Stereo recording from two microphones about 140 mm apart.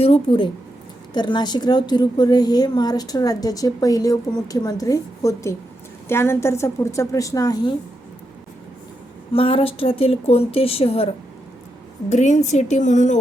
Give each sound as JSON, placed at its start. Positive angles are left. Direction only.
{"t": 0.0, "sound": "a woman's voice", "side_deg": 40}
{"t": 9.3, "sound": "a woman's voice", "side_deg": 40}
{"t": 12.0, "sound": "a woman's voice", "side_deg": 60}